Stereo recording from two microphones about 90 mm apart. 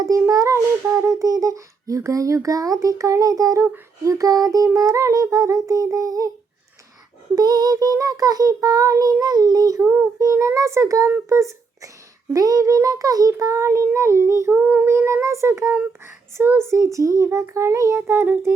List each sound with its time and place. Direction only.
0.0 s speech: 40° right (ahead or behind)
7.3 s child singing: 45° right (ahead or behind)
9.8 s child singing: 20° right (ahead or behind)
10.3 s a child's voice: 35° right (ahead or behind)
14.5 s child singing: 15° right (ahead or behind)
14.8 s speech: 30° right (ahead or behind)
18.0 s child singing: 25° right (ahead or behind)